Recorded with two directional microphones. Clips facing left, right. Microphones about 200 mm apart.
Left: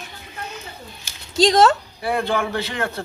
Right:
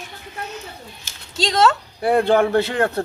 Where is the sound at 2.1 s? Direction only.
40° right (ahead or behind).